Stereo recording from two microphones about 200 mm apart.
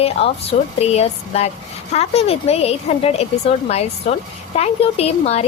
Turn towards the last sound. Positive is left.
turn(degrees=30)  # may be behind; listen again after turning